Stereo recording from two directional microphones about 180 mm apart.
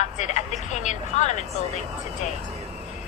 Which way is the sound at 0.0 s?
40° left (ahead or behind).